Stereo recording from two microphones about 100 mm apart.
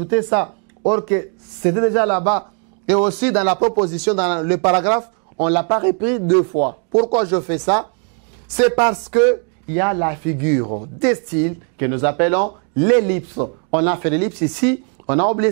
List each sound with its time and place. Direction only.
0.0 s speech: 20° right (ahead or behind)
6.5 s speech: 25° right (ahead or behind)
12.9 s speech: 15° right (ahead or behind)
13.3 s speech: 25° right (ahead or behind)
13.7 s speech: 15° right (ahead or behind)